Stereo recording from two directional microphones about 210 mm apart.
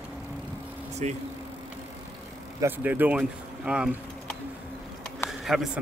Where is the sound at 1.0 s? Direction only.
35° right (ahead or behind).